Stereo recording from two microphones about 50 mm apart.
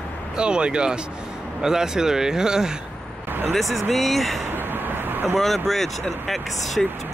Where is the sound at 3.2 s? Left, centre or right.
Right.